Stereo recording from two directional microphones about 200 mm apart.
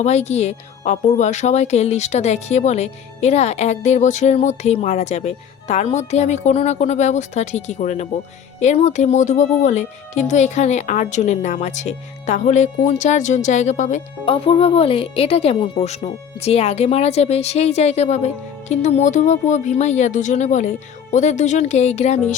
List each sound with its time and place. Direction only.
0.0 s speech: 35° left (ahead or behind)